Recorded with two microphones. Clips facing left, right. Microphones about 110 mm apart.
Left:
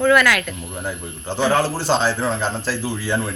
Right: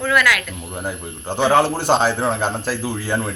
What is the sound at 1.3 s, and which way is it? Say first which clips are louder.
A man's voice: right 3 dB; 20° right (ahead or behind).